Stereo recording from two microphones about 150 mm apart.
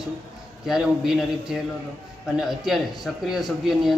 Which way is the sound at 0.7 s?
5° right (ahead or behind).